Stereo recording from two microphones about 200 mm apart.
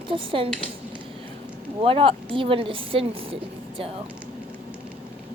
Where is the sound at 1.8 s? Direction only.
25° right (ahead or behind).